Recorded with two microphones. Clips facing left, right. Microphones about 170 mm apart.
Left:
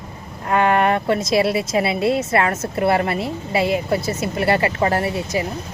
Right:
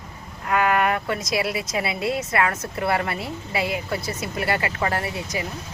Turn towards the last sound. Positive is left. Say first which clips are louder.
# left 6 dB
turn(degrees=30)  # may be behind; listen again after turning